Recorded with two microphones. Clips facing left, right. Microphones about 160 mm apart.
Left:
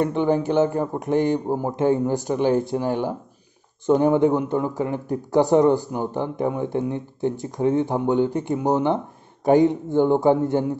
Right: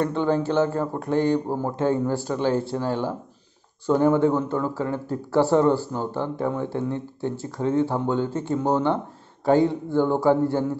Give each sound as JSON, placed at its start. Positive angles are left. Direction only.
{"t": 0.0, "sound": "speech", "side_deg": 15}